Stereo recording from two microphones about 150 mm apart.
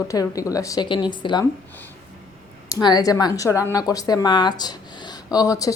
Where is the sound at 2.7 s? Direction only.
25° left (ahead or behind).